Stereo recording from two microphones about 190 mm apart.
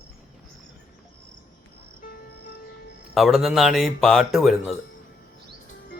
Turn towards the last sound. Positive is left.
turn(degrees=0)  # may be behind; listen again after turning